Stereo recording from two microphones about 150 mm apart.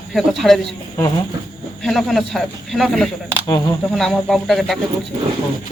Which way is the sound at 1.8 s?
Centre (ahead or behind).